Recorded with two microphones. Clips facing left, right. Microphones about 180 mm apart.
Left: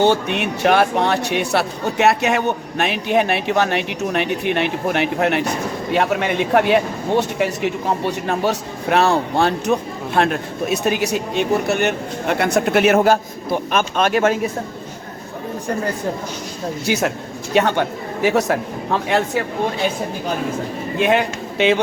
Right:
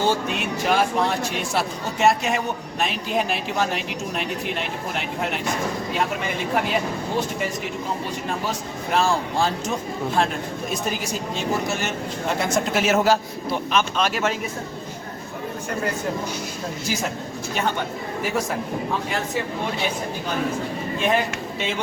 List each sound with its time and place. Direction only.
0.0 s speech: 70° left (ahead or behind); by 14.3 s 50° left (ahead or behind)
16.8 s speech: 70° left (ahead or behind)
21.1 s speech: 75° left (ahead or behind)